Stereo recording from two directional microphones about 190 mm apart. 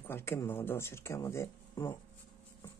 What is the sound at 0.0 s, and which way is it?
Speech, 10° left (ahead or behind).